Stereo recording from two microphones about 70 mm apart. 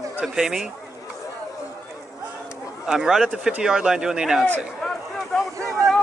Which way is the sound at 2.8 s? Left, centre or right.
Centre.